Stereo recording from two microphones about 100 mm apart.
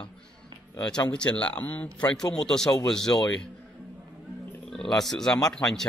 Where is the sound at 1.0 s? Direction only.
10° left (ahead or behind).